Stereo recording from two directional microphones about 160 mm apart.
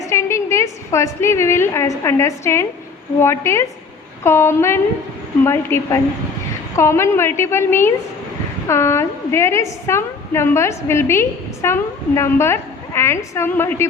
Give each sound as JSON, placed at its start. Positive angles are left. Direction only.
{"t": 0.0, "sound": "a woman's voice", "side_deg": 20}